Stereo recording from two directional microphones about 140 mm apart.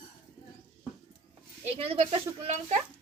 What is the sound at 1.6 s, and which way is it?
A woman's voice, 45° right (ahead or behind).